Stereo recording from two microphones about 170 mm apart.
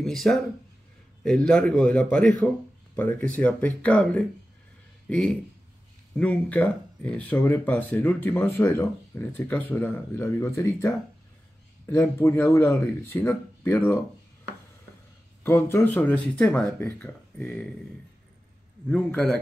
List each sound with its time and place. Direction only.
0.0 s a man's voice: centre (ahead or behind)
15.4 s speech: 15° left (ahead or behind)
18.9 s speech: 10° left (ahead or behind)